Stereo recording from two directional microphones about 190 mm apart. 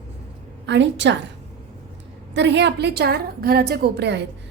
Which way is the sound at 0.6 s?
70° right (ahead or behind).